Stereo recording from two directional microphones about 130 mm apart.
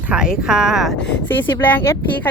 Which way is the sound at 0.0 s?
10° right (ahead or behind).